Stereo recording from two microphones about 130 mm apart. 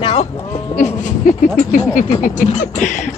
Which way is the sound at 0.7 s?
75° left (ahead or behind).